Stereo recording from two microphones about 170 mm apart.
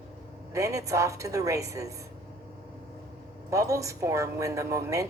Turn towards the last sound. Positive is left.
turn(degrees=-20)  # may be behind; listen again after turning